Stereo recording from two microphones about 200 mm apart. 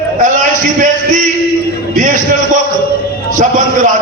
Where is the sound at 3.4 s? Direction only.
40° right (ahead or behind).